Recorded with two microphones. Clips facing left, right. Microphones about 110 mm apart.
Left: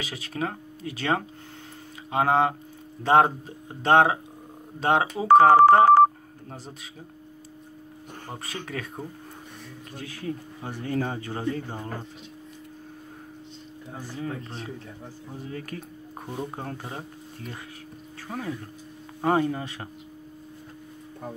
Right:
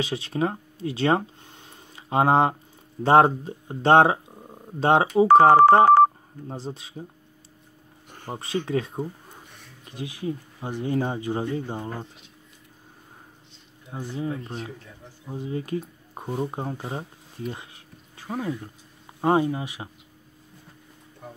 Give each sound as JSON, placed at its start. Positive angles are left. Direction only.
{"t": 0.0, "sound": "speech", "side_deg": -30}
{"t": 8.3, "sound": "speech", "side_deg": -25}
{"t": 9.9, "sound": "speech", "side_deg": -15}
{"t": 13.9, "sound": "speech", "side_deg": -20}
{"t": 18.2, "sound": "speech", "side_deg": -15}